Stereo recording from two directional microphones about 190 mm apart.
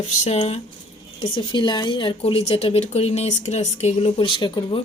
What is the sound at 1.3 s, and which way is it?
Speech, 25° left (ahead or behind).